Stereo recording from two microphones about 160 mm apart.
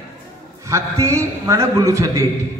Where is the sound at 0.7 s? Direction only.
20° right (ahead or behind).